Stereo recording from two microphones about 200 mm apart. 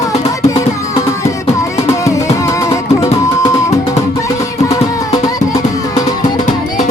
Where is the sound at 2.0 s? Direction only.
15° left (ahead or behind).